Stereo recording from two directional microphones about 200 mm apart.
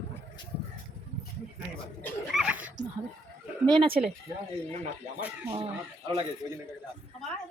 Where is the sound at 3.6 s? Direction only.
25° right (ahead or behind).